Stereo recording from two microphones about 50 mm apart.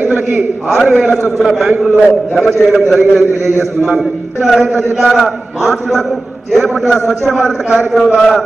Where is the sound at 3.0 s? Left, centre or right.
Right.